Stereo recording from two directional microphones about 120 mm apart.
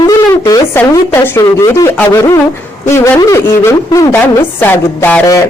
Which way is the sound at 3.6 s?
25° left (ahead or behind).